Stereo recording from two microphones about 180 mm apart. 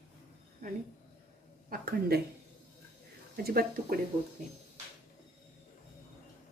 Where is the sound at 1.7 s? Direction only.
55° right (ahead or behind).